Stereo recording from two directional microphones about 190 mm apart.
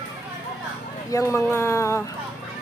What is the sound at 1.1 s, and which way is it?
Speech, 15° left (ahead or behind).